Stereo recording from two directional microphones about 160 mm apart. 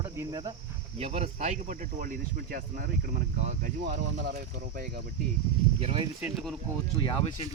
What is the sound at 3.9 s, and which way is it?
Speech, 70° right (ahead or behind).